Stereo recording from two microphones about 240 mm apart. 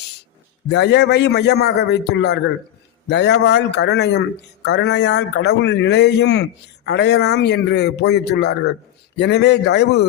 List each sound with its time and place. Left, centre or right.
0.7 s a man's voice: left